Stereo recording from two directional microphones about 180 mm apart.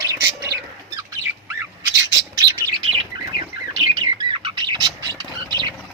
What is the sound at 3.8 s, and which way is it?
Bird, 25° right (ahead or behind).